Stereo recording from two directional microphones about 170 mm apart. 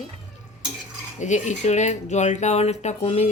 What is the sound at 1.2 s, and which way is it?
A woman's voice, 45° left (ahead or behind).